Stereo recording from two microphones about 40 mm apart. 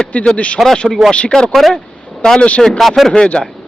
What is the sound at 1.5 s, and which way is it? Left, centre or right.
Speech, centre.